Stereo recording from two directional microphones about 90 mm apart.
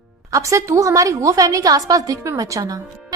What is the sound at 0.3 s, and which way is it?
A woman's voice, 35° right (ahead or behind).